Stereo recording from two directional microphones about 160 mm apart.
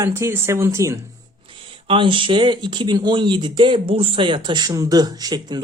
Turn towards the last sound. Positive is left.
turn(degrees=-25)  # may be behind; listen again after turning